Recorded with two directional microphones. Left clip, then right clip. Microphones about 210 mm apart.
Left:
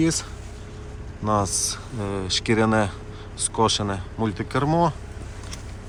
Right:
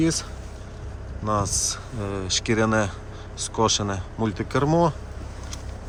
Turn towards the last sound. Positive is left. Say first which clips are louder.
# even
turn(degrees=-25)  # may be behind; listen again after turning